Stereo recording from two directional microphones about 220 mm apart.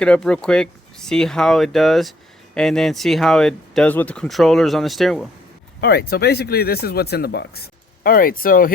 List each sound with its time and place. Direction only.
0.0 s speech: 5° left (ahead or behind)
5.8 s speech: 45° left (ahead or behind)